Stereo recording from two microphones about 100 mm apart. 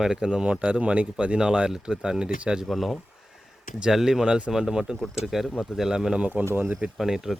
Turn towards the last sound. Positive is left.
turn(degrees=-5)  # may be behind; listen again after turning